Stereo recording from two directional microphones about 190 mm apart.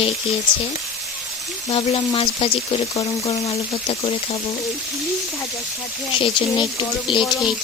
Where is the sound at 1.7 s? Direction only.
30° left (ahead or behind).